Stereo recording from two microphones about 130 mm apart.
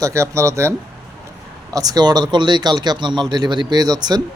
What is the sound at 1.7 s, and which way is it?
Speech, 30° right (ahead or behind).